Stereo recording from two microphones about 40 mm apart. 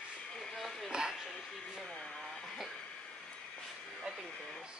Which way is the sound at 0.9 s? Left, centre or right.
Centre.